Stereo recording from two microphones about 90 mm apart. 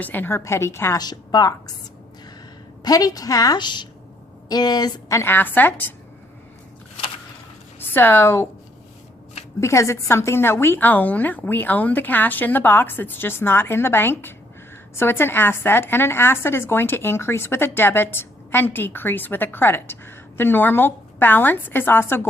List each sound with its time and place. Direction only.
0.0 s a woman's voice: 20° left (ahead or behind)
0.9 s a woman's voice: 45° left (ahead or behind)
2.8 s a woman's voice: 45° left (ahead or behind)
5.0 s a woman's voice: 35° left (ahead or behind)
5.3 s a woman's voice: 20° left (ahead or behind)
7.8 s speech: 25° left (ahead or behind)
9.6 s a woman's voice: 30° left (ahead or behind)